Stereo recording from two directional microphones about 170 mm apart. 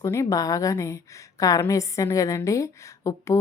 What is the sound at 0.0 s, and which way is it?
A woman's voice, 15° left (ahead or behind).